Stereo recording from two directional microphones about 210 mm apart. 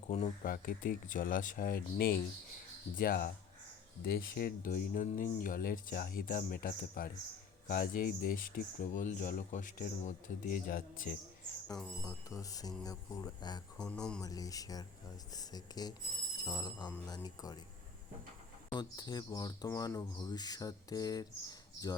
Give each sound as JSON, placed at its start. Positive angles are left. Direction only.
{"t": 0.1, "sound": "speech", "side_deg": 35}
{"t": 12.0, "sound": "speech", "side_deg": 15}
{"t": 13.7, "sound": "speech", "side_deg": 5}
{"t": 14.2, "sound": "speech", "side_deg": 15}
{"t": 18.7, "sound": "speech", "side_deg": 20}